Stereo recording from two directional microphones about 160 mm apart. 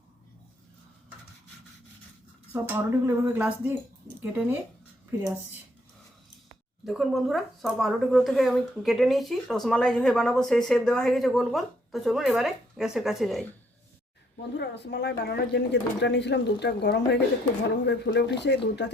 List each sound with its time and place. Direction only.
2.5 s speech: 15° right (ahead or behind)
6.8 s speech: centre (ahead or behind)
14.5 s speech: 90° left